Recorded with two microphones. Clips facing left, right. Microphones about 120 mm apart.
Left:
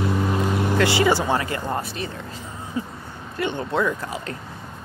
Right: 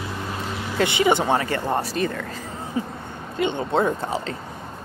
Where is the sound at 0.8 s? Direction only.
20° right (ahead or behind).